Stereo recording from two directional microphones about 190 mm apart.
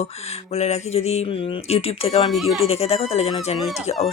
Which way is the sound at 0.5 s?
35° left (ahead or behind).